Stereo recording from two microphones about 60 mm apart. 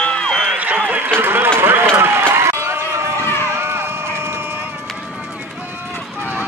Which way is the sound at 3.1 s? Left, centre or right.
Left.